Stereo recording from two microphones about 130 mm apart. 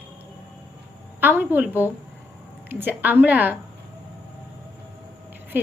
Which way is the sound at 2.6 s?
15° right (ahead or behind).